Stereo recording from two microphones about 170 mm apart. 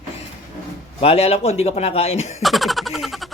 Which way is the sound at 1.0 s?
35° left (ahead or behind).